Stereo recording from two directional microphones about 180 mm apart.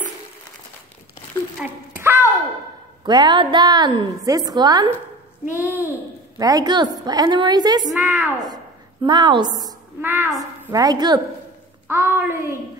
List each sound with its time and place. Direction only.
1.6 s a sound: 10° right (ahead or behind)
3.1 s a woman's voice: 25° right (ahead or behind)
5.4 s child singing: 10° right (ahead or behind)
6.3 s a woman's voice: 20° right (ahead or behind)
7.8 s a woman's voice: 5° right (ahead or behind)
9.0 s a woman's voice: 25° right (ahead or behind)
11.9 s child singing: 15° right (ahead or behind)